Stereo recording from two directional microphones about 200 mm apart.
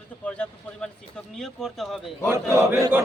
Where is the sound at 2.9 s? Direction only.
10° right (ahead or behind).